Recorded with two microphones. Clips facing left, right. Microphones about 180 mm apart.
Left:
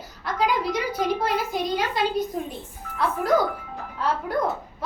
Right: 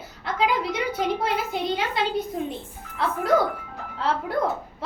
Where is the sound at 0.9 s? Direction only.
25° right (ahead or behind).